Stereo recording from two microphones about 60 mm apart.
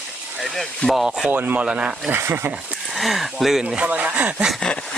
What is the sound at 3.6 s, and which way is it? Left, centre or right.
Speech, centre.